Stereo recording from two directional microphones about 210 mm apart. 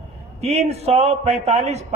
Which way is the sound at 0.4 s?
30° right (ahead or behind).